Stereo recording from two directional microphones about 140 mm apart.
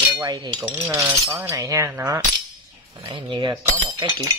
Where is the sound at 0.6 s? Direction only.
20° right (ahead or behind).